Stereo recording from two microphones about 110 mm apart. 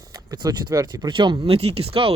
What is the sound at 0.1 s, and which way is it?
Speech, 35° right (ahead or behind).